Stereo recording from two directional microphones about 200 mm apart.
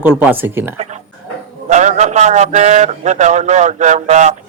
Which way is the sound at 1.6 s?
35° right (ahead or behind).